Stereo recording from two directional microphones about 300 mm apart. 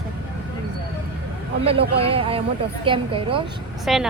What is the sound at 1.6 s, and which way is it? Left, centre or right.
A man's voice, centre.